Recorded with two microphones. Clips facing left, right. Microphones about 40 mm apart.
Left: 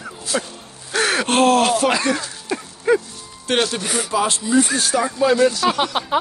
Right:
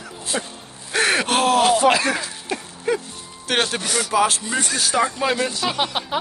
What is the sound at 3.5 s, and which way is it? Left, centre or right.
Speech, right.